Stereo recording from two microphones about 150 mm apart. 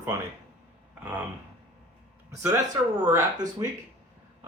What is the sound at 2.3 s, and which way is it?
Speech, 20° right (ahead or behind).